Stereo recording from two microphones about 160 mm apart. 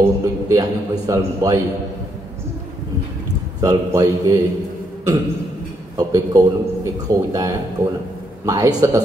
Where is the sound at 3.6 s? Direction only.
25° right (ahead or behind).